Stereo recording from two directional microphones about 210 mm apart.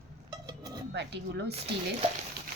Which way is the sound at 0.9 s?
55° right (ahead or behind).